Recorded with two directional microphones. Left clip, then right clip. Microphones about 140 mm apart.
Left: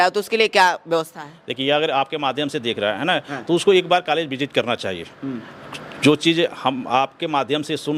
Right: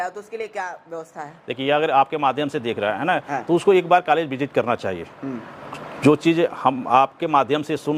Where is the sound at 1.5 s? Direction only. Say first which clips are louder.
Right 1 dB; 25° left (ahead or behind).